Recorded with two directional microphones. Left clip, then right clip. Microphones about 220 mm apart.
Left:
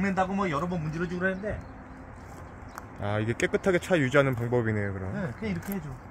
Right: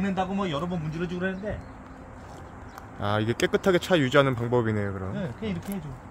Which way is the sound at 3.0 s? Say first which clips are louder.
Right 3 dB; 15° right (ahead or behind).